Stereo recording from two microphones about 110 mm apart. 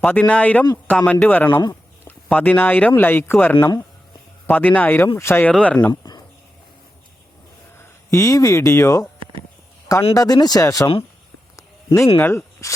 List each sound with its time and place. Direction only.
0.0 s speech: 10° left (ahead or behind)
5.9 s a sound: 40° left (ahead or behind)
7.8 s speech: 30° left (ahead or behind)
10.2 s speech: 35° left (ahead or behind)
11.5 s a sound: 25° left (ahead or behind)
12.1 s speech: 20° left (ahead or behind)